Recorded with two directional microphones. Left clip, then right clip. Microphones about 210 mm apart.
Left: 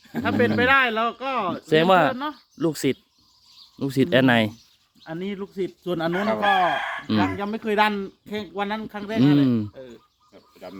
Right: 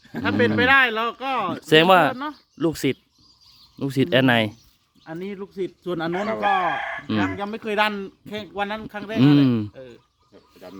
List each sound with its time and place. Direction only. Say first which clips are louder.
0.2 s speech: right 1 dB; 45° right (ahead or behind)
1.5 s speech: right 3 dB; 20° right (ahead or behind)
6.7 s speech: left 1 dB; 55° left (ahead or behind)
7.3 s speech: left 1 dB; 30° right (ahead or behind)
10.3 s pig: left 2 dB; 10° left (ahead or behind)